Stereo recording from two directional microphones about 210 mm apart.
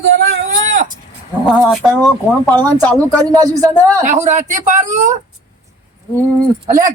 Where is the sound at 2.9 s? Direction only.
15° right (ahead or behind).